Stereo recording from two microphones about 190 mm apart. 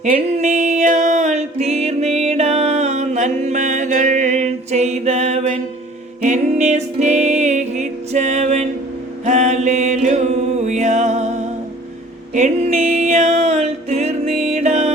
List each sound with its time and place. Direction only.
0.0 s music: 35° right (ahead or behind)